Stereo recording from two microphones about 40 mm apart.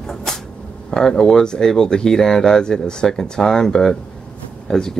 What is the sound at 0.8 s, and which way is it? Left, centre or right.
Speech, centre.